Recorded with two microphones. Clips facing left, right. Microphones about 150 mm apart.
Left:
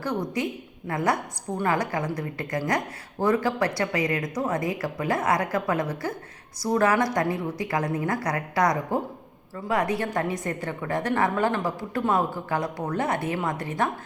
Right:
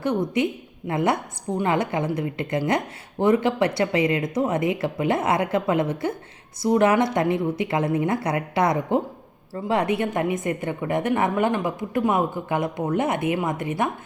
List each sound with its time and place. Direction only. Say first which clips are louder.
0.0 s speech: right 5 dB; 25° right (ahead or behind)